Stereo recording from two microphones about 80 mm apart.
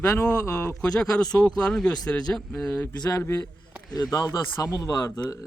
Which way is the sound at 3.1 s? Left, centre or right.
Left.